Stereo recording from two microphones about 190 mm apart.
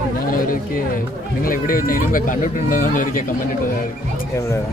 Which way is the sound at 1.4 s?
50° left (ahead or behind).